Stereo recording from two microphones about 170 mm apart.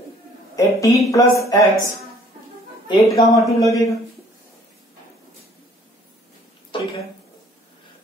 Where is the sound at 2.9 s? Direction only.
20° left (ahead or behind).